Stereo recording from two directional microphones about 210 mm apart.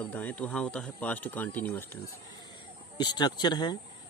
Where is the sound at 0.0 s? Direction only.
5° left (ahead or behind).